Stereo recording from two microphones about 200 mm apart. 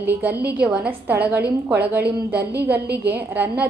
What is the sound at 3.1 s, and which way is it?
Speech, 10° right (ahead or behind).